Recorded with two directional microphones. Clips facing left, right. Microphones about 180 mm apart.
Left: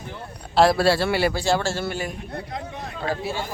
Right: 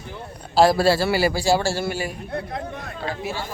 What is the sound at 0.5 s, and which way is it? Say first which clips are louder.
A man's voice: right 1 dB; centre (ahead or behind).